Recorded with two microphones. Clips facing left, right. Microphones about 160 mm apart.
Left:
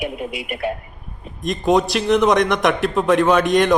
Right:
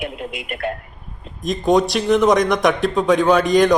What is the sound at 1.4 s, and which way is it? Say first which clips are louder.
A man's voice: right 1 dB; centre (ahead or behind).